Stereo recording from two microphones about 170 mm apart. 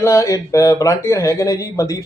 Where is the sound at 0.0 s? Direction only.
20° left (ahead or behind).